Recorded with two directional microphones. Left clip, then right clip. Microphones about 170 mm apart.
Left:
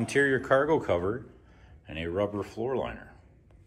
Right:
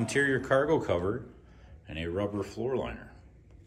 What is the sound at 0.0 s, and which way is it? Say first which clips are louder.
Speech: left 2 dB; centre (ahead or behind).